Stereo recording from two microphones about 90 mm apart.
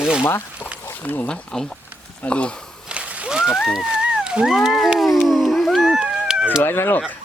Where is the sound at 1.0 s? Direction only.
20° left (ahead or behind).